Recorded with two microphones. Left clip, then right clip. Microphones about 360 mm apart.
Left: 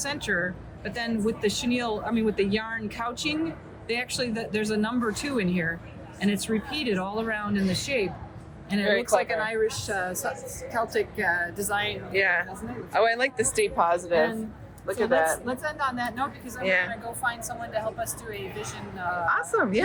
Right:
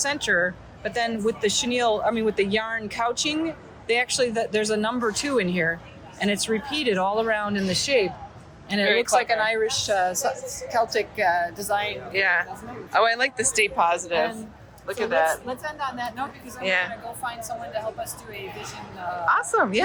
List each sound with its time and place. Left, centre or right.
0.0 s a woman's voice: centre
9.1 s a woman's voice: right
12.1 s a woman's voice: centre